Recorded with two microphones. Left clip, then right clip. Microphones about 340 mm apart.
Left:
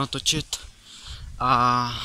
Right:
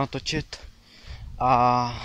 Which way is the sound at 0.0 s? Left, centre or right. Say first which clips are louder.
Left 3 dB; centre.